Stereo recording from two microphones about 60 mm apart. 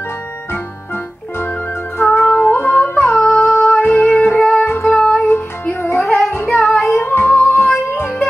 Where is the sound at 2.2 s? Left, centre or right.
Left.